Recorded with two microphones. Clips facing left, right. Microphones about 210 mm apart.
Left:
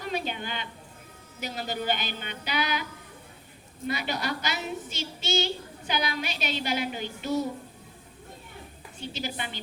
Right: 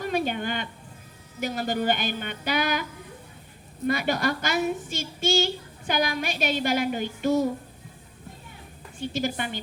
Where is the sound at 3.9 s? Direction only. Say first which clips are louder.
Right 6 dB; 50° right (ahead or behind).